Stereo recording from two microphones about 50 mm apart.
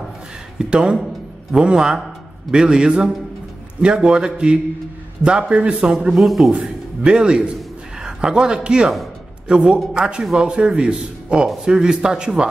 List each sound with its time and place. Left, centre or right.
0.6 s a man's voice: centre
6.1 s a man's voice: centre
7.0 s a man's voice: right